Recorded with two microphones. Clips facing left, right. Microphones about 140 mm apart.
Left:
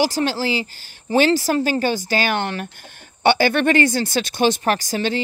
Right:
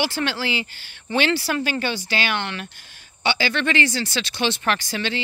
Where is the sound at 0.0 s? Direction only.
40° left (ahead or behind).